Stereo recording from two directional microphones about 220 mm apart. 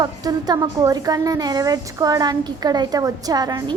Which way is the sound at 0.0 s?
15° right (ahead or behind).